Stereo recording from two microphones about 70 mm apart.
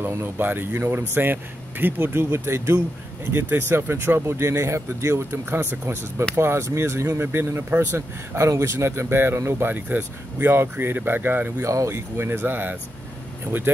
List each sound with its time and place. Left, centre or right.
0.0 s speech: right
7.7 s speech: right
8.4 s speech: right